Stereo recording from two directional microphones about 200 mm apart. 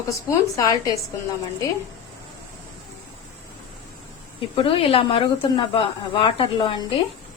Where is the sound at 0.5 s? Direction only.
20° left (ahead or behind).